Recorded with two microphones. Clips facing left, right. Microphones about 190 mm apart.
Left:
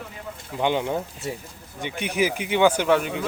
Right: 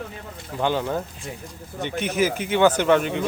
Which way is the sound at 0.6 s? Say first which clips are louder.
Even; 15° left (ahead or behind).